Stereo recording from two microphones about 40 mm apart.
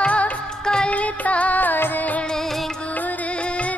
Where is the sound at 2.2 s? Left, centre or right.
Centre.